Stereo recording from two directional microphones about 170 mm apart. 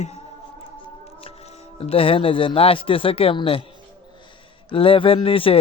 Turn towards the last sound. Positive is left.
turn(degrees=35)  # may be behind; listen again after turning